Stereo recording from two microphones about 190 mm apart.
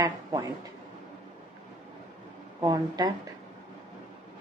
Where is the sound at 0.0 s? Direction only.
15° right (ahead or behind).